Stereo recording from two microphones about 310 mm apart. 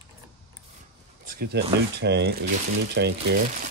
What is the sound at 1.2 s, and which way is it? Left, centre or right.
Speech, right.